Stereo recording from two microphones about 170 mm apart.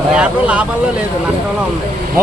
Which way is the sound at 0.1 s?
10° right (ahead or behind).